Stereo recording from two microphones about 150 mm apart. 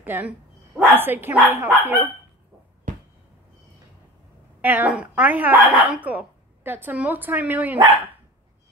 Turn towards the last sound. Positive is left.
turn(degrees=-10)  # may be behind; listen again after turning